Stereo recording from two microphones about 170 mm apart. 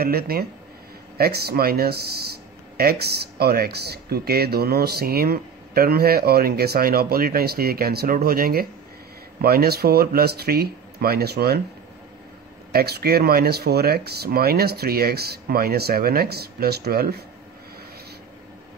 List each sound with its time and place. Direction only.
0.0 s speech: 65° right (ahead or behind)
12.7 s speech: 65° right (ahead or behind)